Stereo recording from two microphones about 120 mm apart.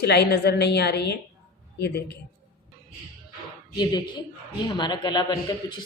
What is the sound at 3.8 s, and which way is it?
A woman's voice, 35° left (ahead or behind).